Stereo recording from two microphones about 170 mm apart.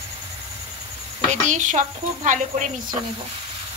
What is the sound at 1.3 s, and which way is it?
Speech, 45° right (ahead or behind).